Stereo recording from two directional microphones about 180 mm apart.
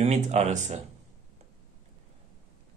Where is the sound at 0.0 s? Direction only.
40° right (ahead or behind).